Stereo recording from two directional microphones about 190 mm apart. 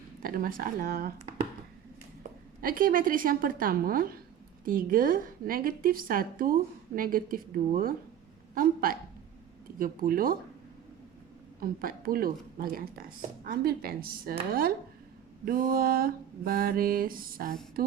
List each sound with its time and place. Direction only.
0.2 s a woman's voice: 50° right (ahead or behind)
2.6 s a woman's voice: 50° right (ahead or behind)
11.6 s a woman's voice: 50° right (ahead or behind)
15.4 s a woman's voice: 50° right (ahead or behind)